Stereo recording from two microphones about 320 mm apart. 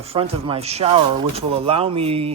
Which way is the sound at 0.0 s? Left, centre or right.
Centre.